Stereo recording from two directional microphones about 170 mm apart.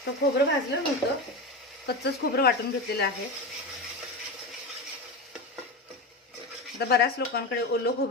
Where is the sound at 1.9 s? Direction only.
70° left (ahead or behind).